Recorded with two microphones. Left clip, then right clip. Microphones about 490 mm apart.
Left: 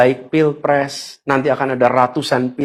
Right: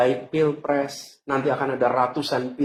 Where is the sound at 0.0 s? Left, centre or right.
Left.